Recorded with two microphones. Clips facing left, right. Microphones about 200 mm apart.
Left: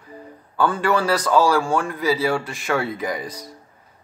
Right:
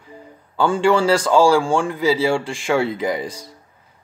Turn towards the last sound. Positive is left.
turn(degrees=-25)  # may be behind; listen again after turning